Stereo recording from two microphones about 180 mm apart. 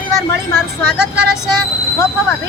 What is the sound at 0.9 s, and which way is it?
Speech, 5° right (ahead or behind).